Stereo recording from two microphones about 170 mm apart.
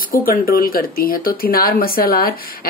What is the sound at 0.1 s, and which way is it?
Speech, 60° left (ahead or behind).